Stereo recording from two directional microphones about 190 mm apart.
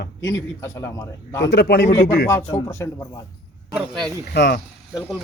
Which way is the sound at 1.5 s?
60° left (ahead or behind).